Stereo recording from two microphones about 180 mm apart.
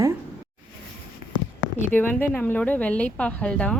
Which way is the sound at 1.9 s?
10° left (ahead or behind).